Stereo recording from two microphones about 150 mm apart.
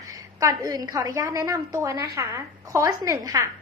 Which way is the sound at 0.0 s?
20° right (ahead or behind).